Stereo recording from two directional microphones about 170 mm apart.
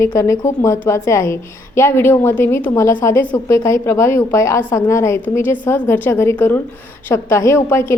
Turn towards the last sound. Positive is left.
turn(degrees=15)  # may be behind; listen again after turning